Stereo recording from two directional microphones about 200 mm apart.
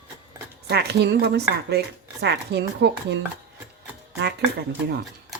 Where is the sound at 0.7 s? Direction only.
55° right (ahead or behind).